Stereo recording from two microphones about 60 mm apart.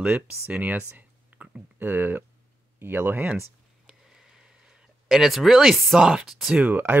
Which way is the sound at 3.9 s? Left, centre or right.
Centre.